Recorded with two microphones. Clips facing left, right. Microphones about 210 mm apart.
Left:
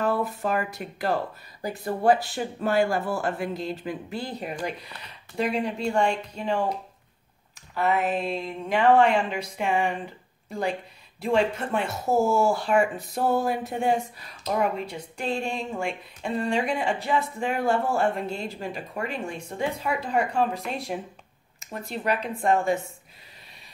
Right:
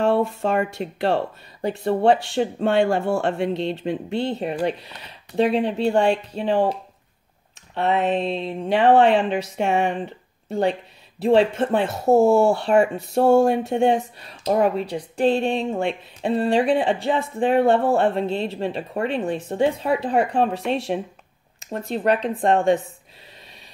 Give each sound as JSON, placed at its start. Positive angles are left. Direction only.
{"t": 0.0, "sound": "speech", "side_deg": -30}
{"t": 7.7, "sound": "speech", "side_deg": -30}
{"t": 13.2, "sound": "a sound", "side_deg": -75}
{"t": 14.4, "sound": "speech", "side_deg": -35}
{"t": 21.5, "sound": "speech", "side_deg": -35}